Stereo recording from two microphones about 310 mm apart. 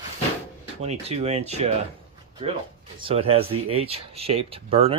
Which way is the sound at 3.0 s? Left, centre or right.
Centre.